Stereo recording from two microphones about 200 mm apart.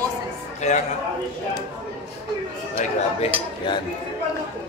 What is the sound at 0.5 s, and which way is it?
Speech, 35° left (ahead or behind).